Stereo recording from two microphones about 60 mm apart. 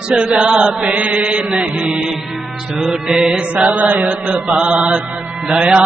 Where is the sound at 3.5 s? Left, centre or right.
Right.